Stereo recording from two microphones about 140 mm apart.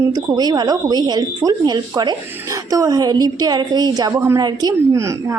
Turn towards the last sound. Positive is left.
turn(degrees=-20)  # may be behind; listen again after turning